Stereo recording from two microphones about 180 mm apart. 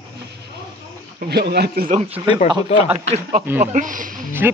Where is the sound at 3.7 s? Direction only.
45° right (ahead or behind).